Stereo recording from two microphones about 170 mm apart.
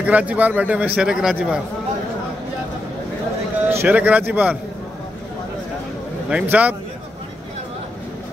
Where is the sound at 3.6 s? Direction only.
10° right (ahead or behind).